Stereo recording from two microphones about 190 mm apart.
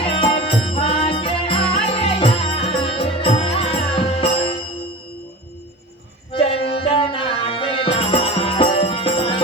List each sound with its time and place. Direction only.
0.0 s music: 30° left (ahead or behind)
6.3 s music: 30° left (ahead or behind)